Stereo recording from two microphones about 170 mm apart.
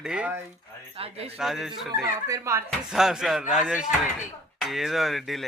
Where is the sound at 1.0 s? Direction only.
35° right (ahead or behind).